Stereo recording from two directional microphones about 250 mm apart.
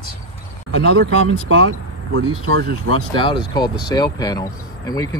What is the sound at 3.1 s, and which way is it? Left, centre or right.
Speech, centre.